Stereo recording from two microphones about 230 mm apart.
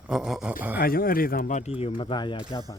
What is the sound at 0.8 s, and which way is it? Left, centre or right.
Speech, left.